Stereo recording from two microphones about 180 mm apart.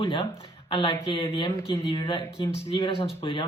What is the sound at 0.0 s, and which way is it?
Speech, 30° left (ahead or behind).